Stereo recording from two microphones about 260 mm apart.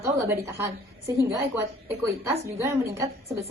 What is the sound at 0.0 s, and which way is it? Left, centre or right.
A woman's voice, centre.